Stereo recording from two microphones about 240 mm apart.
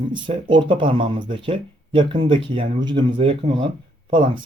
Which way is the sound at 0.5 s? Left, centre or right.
Right.